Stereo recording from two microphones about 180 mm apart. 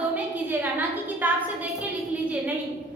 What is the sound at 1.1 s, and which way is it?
Speech, 10° right (ahead or behind).